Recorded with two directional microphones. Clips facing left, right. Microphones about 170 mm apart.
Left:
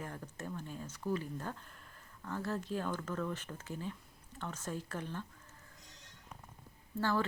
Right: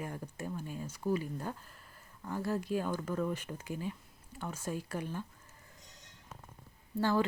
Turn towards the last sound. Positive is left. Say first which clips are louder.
# right 3 dB
turn(degrees=-15)  # may be behind; listen again after turning